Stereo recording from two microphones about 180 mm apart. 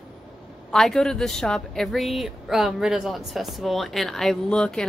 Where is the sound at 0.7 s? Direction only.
Centre (ahead or behind).